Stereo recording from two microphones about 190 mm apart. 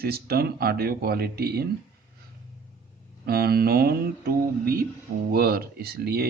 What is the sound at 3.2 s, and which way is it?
Speech, 55° right (ahead or behind).